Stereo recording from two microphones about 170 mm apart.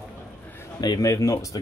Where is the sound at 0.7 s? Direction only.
20° left (ahead or behind).